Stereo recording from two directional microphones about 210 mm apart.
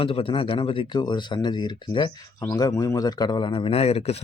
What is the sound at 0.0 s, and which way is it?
Speech, 25° left (ahead or behind).